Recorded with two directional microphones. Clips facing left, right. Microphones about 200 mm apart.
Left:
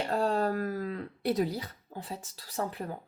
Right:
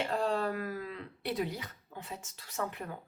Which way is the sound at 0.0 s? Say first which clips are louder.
Left 3 dB; 40° left (ahead or behind).